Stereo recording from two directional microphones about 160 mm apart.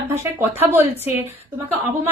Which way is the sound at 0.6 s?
15° right (ahead or behind).